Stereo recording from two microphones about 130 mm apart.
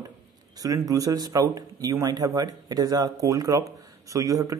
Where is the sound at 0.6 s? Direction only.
25° right (ahead or behind).